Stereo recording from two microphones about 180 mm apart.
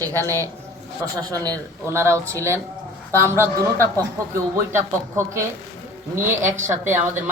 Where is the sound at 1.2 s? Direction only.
20° right (ahead or behind).